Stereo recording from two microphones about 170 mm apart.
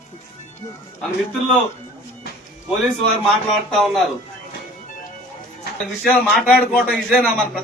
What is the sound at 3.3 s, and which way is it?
Speech, centre (ahead or behind).